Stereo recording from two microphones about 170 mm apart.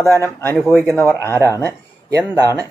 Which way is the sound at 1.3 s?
20° right (ahead or behind).